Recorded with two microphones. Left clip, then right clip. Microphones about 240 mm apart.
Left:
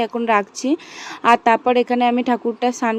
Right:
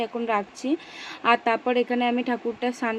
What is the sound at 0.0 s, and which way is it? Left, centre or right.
Speech, left.